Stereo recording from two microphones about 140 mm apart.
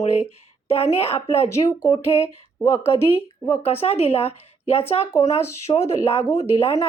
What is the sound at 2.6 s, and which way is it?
Speech, 20° left (ahead or behind).